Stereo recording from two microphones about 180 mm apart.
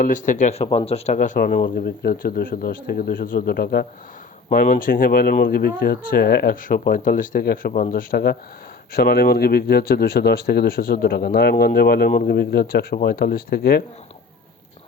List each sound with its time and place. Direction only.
0.0 s speech: 45° left (ahead or behind)
4.4 s speech: 45° left (ahead or behind)